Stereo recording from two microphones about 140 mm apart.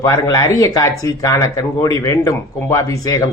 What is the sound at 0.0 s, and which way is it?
Speech, 20° left (ahead or behind).